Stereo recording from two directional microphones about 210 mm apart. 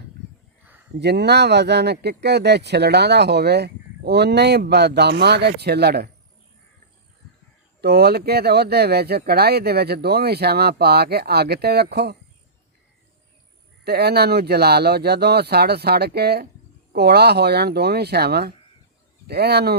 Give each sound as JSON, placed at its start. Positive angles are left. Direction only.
{"t": 0.9, "sound": "speech", "side_deg": -50}
{"t": 7.8, "sound": "speech", "side_deg": -50}
{"t": 13.8, "sound": "speech", "side_deg": -50}